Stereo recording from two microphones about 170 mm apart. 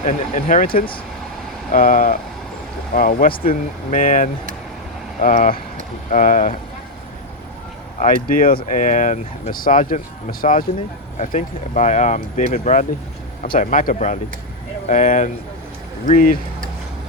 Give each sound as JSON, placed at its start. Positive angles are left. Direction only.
{"t": 0.0, "sound": "speech", "side_deg": 50}
{"t": 7.9, "sound": "speech", "side_deg": 55}